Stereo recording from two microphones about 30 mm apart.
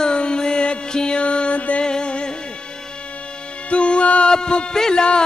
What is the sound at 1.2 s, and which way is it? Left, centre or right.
Music, left.